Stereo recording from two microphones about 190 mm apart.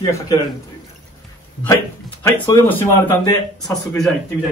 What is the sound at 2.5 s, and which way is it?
Speech, 10° left (ahead or behind).